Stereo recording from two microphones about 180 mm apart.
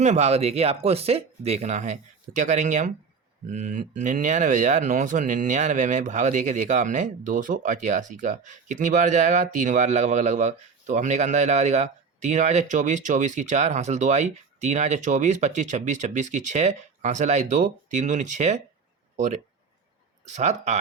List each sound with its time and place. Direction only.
0.0 s speech: 40° right (ahead or behind)